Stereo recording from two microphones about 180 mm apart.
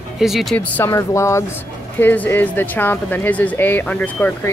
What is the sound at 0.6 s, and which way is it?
Speech, 10° left (ahead or behind).